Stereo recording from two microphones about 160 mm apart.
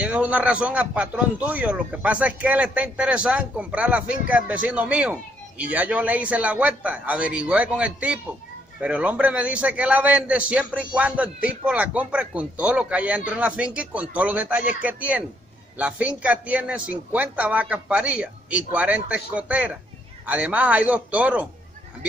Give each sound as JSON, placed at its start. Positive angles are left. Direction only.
{"t": 0.0, "sound": "a man's voice", "side_deg": -10}